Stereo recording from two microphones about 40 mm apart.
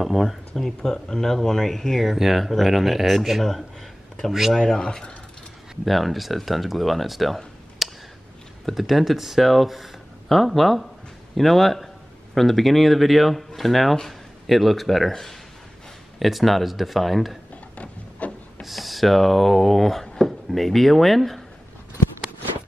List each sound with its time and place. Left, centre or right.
0.0 s speech: centre
0.9 s speech: centre
4.6 s speech: centre
5.9 s speech: centre
7.8 s a sound: centre
8.7 s speech: centre
18.2 s a sound: left
18.6 s speech: centre